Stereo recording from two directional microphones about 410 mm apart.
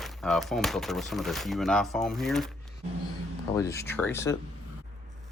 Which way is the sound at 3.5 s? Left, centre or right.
Centre.